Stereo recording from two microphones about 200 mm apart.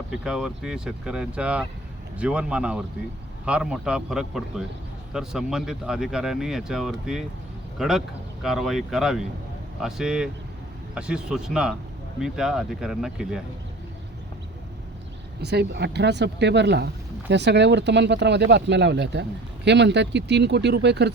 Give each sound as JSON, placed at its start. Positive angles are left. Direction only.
{"t": 0.1, "sound": "speech", "side_deg": -5}
{"t": 15.4, "sound": "speech", "side_deg": -55}